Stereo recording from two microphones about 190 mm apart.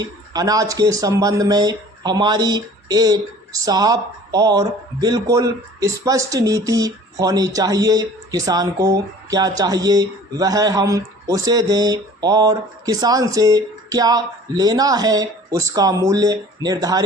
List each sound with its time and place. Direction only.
0.0 s speech: 20° right (ahead or behind)